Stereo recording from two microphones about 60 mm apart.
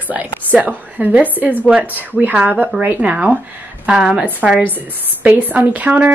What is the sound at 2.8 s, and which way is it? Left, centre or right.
Speech, right.